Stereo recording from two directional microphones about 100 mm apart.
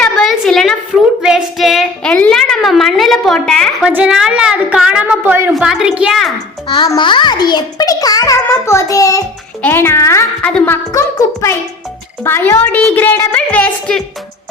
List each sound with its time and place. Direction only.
0.0 s a sound: centre (ahead or behind)
1.2 s child singing: 5° right (ahead or behind)
2.0 s a woman's voice: 15° left (ahead or behind)
2.3 s a woman's voice: centre (ahead or behind)
3.8 s a woman's voice: 10° right (ahead or behind)
5.5 s a woman's voice: 5° right (ahead or behind)
6.7 s a child's voice: 45° left (ahead or behind)
8.4 s a woman's voice: 30° left (ahead or behind)
9.6 s a woman's voice: 25° left (ahead or behind)
12.2 s a woman's voice: 25° left (ahead or behind)